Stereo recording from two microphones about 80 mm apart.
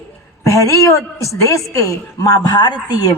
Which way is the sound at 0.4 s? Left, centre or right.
Left.